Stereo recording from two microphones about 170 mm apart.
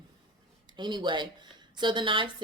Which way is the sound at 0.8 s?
25° right (ahead or behind).